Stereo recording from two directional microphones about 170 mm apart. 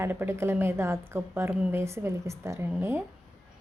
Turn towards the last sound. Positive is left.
turn(degrees=-10)  # may be behind; listen again after turning